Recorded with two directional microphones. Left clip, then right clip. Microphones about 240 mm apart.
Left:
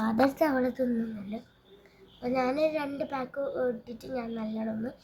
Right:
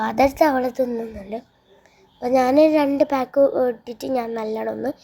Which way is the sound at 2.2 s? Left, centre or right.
Right.